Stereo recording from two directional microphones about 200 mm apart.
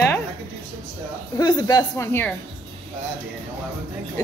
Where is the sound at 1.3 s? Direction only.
20° left (ahead or behind).